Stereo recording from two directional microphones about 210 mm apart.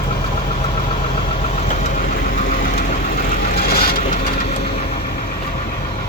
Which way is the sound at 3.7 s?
45° left (ahead or behind).